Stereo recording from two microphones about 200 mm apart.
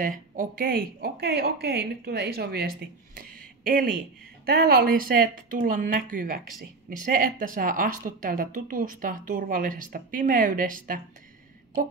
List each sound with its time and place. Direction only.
0.0 s speech: 45° right (ahead or behind)
3.2 s a sound: 45° right (ahead or behind)
4.5 s speech: 50° right (ahead or behind)